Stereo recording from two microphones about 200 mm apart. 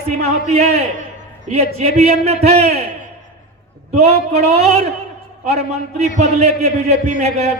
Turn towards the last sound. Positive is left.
turn(degrees=-30)  # may be behind; listen again after turning